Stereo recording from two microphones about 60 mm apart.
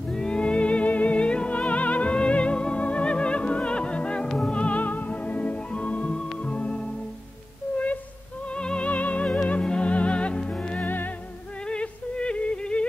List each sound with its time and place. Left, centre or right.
0.1 s music: centre
7.7 s a sound: left
8.5 s music: centre
11.6 s yodeling: centre